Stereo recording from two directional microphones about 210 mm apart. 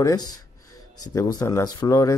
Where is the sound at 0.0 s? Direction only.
20° left (ahead or behind).